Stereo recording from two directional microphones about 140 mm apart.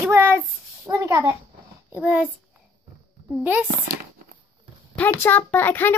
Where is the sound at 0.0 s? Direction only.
15° right (ahead or behind).